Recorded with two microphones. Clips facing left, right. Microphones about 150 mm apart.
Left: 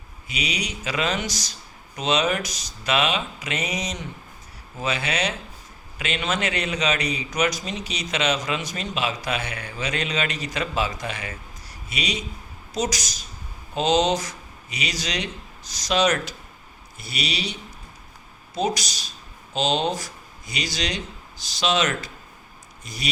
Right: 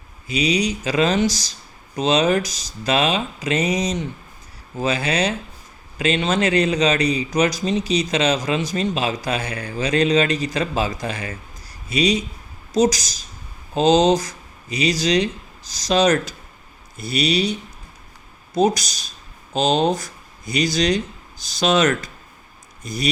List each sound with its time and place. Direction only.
0.3 s speech: 35° right (ahead or behind)
18.5 s speech: 45° right (ahead or behind)